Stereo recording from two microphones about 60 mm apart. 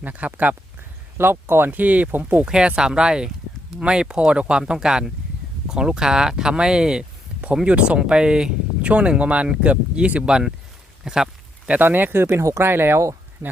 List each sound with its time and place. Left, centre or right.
0.0 s speech: right
1.2 s speech: right
2.5 s speech: centre
11.0 s a sound: centre
11.7 s speech: right
12.4 s speech: right
12.6 s speech: right
13.4 s speech: right